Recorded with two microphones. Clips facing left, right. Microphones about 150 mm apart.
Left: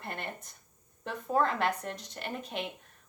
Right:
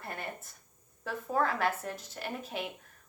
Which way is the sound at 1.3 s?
25° left (ahead or behind).